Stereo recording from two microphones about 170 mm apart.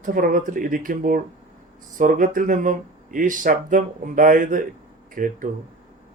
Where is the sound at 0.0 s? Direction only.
55° right (ahead or behind).